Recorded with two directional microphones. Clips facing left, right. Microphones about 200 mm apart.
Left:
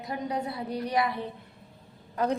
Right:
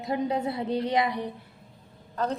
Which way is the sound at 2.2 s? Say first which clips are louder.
Left 1 dB; 10° left (ahead or behind).